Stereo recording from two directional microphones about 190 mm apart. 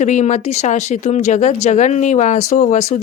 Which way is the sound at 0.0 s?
40° left (ahead or behind).